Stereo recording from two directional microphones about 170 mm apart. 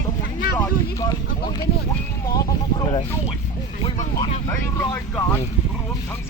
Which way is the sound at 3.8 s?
30° left (ahead or behind).